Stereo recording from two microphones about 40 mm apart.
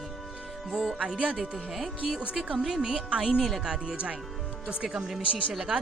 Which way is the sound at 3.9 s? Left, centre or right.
Right.